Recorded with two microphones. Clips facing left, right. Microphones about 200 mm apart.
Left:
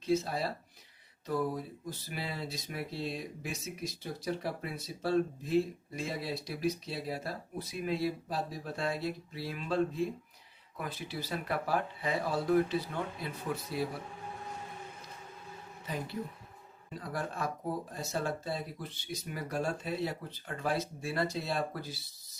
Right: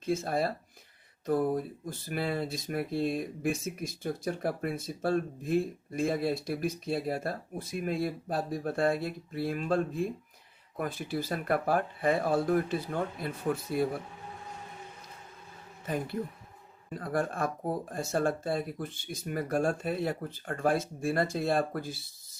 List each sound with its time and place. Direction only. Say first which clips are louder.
0.0 s speech: right 2 dB; 50° right (ahead or behind)
15.9 s speech: right 5 dB; 50° right (ahead or behind)